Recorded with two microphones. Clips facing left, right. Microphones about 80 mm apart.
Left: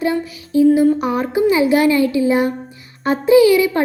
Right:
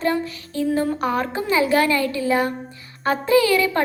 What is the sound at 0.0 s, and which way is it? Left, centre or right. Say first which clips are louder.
A woman's voice: left 3 dB; centre.